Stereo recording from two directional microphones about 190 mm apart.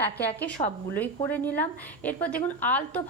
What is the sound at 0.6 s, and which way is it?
Speech, 45° left (ahead or behind).